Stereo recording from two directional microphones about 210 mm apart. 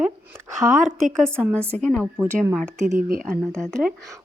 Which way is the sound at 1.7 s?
5° left (ahead or behind).